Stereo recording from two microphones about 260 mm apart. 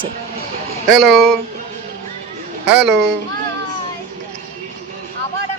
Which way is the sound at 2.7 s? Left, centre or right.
Right.